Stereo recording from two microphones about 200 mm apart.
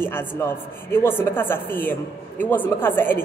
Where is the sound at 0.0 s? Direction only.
10° left (ahead or behind).